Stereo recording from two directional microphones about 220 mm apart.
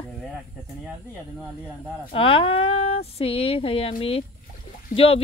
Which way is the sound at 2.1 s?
25° left (ahead or behind).